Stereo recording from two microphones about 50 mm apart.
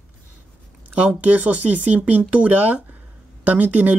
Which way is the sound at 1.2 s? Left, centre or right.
Right.